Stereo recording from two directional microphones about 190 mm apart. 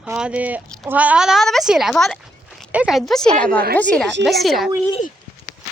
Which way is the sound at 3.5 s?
50° right (ahead or behind).